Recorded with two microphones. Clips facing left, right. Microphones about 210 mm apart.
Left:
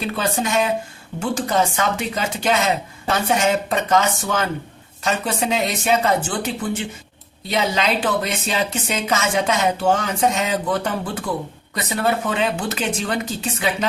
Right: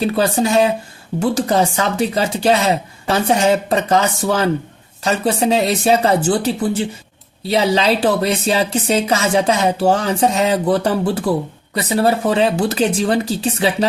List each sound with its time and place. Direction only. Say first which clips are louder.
0.0 s speech: right 7 dB; 35° right (ahead or behind)